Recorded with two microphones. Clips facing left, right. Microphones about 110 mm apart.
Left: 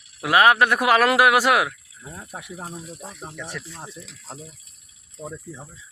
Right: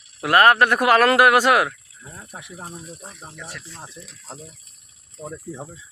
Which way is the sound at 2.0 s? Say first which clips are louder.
Left 2 dB; 15° left (ahead or behind).